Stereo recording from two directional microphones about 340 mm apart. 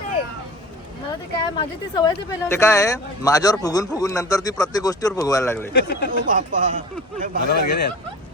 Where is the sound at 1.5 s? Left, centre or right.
Centre.